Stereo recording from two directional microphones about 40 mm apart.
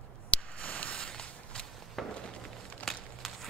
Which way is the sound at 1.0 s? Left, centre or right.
Left.